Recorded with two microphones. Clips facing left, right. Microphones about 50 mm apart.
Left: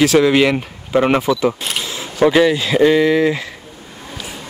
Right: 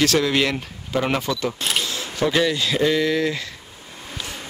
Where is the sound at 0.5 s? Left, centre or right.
Left.